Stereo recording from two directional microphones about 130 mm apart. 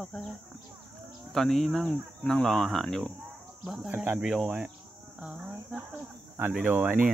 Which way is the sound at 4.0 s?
5° right (ahead or behind).